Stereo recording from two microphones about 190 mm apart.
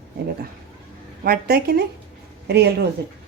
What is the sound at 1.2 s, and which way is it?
Speech, 55° right (ahead or behind).